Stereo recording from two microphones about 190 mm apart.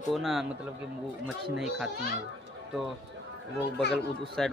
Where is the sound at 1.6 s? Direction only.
5° right (ahead or behind).